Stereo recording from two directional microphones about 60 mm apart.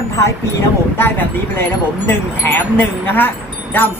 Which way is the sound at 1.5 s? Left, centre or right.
Left.